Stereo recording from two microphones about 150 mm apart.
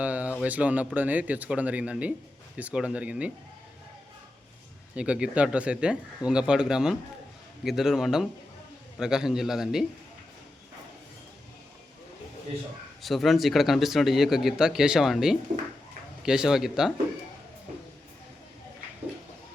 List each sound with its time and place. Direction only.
0.0 s a sound: 10° right (ahead or behind)
0.4 s speech: 10° right (ahead or behind)
4.9 s speech: 5° right (ahead or behind)
13.0 s speech: centre (ahead or behind)